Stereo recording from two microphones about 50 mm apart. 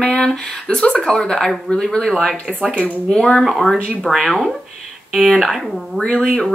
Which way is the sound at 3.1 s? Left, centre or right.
Centre.